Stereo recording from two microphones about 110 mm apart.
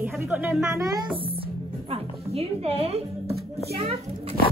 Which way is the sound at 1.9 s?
65° right (ahead or behind).